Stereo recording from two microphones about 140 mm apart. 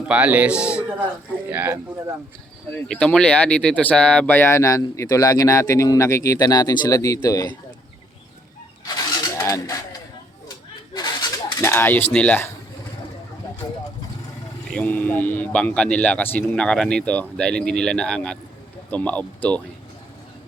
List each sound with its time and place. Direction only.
0.1 s a man's voice: 10° right (ahead or behind)
2.9 s speech: 5° left (ahead or behind); by 7.5 s 25° left (ahead or behind)
9.2 s a sound: 25° left (ahead or behind)
10.9 s a sound: 30° left (ahead or behind)
11.6 s speech: 15° left (ahead or behind)
13.6 s speech: 25° left (ahead or behind)
14.7 s speech: 10° left (ahead or behind)